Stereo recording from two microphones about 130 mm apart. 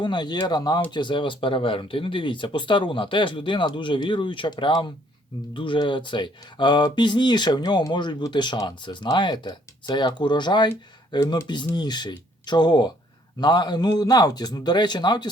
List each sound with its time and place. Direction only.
0.0 s speech: 35° left (ahead or behind)